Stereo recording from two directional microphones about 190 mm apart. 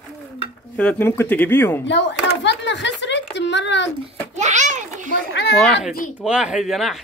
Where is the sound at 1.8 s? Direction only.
70° left (ahead or behind).